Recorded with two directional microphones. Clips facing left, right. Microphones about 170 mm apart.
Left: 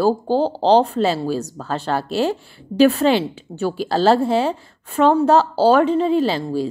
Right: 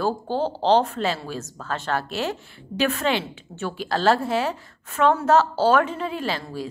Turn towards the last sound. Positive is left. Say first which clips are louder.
# left 9 dB
turn(degrees=30)  # may be behind; listen again after turning